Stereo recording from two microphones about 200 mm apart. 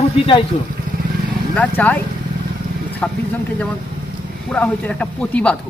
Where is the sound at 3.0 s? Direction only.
5° left (ahead or behind).